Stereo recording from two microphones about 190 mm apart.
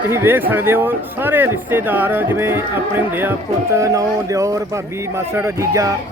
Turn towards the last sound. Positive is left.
turn(degrees=-15)  # may be behind; listen again after turning